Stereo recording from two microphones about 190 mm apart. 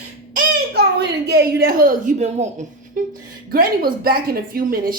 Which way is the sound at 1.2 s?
55° right (ahead or behind).